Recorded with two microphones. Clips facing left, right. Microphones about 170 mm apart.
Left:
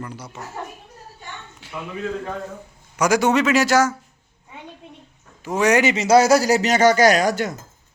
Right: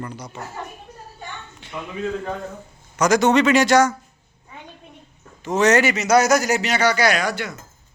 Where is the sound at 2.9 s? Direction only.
10° left (ahead or behind).